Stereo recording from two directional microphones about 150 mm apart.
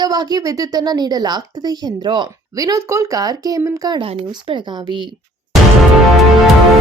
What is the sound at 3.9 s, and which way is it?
Speech, 40° right (ahead or behind).